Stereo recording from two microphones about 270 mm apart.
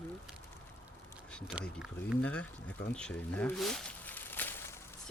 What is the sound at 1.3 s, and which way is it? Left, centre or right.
Speech, centre.